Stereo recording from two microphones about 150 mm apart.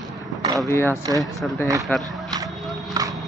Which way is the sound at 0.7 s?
15° left (ahead or behind).